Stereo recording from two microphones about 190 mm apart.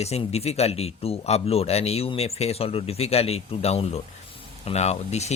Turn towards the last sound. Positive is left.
turn(degrees=35)  # may be behind; listen again after turning